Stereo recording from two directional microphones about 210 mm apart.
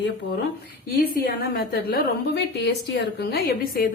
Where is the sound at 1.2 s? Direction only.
50° left (ahead or behind).